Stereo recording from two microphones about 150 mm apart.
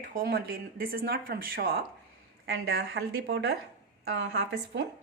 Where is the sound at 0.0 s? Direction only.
70° right (ahead or behind); by 3.0 s 90° right.